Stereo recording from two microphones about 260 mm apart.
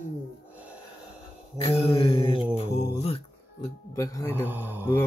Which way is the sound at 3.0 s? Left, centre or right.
Left.